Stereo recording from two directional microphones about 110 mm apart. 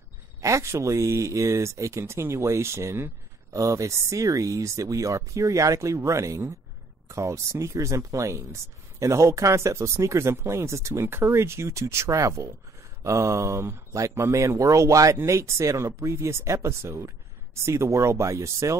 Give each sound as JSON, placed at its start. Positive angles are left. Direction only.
{"t": 0.4, "sound": "speech", "side_deg": -30}